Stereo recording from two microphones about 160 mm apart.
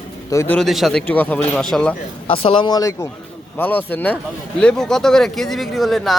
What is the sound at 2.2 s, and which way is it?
Speech, 35° left (ahead or behind).